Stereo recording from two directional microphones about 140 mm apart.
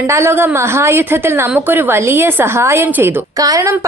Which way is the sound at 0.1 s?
20° right (ahead or behind).